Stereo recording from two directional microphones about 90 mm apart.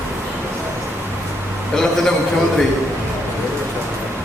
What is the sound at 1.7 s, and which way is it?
Speech, 5° left (ahead or behind).